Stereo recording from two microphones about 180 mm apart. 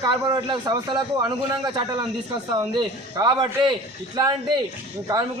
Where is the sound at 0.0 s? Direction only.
20° right (ahead or behind).